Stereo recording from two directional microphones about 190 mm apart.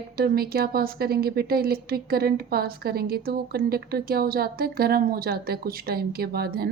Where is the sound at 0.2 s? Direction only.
55° right (ahead or behind).